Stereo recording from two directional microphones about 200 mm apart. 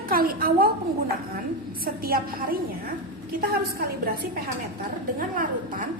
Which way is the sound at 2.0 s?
45° right (ahead or behind).